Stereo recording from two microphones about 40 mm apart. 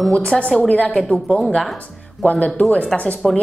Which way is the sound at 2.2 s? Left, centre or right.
Left.